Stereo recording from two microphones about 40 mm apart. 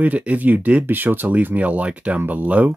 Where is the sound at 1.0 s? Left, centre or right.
Right.